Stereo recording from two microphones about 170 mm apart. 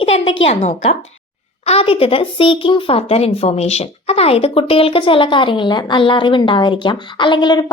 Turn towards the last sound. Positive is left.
turn(degrees=25)  # may be behind; listen again after turning